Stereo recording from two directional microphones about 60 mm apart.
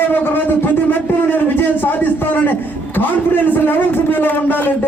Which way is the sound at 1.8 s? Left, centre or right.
Left.